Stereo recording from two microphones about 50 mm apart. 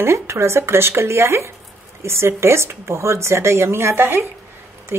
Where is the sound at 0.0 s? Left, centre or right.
Right.